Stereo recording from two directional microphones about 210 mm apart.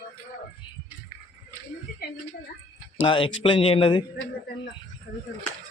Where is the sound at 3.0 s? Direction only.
25° left (ahead or behind).